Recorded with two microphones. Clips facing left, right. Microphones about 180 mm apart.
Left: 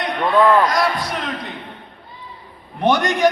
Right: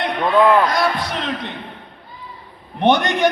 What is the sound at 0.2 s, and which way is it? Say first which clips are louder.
Speech: even; 10° right (ahead or behind).